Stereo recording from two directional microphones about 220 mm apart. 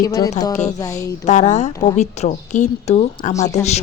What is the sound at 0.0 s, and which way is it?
Speech, 15° left (ahead or behind).